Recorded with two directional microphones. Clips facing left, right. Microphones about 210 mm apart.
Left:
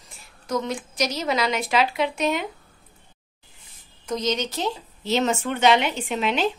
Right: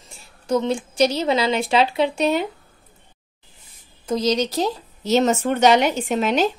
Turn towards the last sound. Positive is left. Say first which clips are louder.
# right 4 dB
turn(degrees=-40)  # may be behind; listen again after turning